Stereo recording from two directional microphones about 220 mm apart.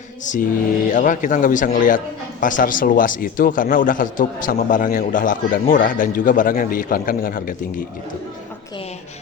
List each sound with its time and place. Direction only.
0.3 s a man's voice: 35° left (ahead or behind)